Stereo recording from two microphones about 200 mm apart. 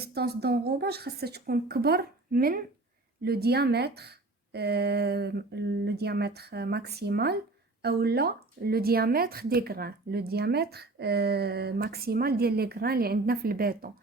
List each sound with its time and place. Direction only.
0.0 s speech: 50° right (ahead or behind)